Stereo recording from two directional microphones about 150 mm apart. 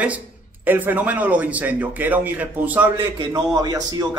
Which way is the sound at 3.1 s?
30° right (ahead or behind).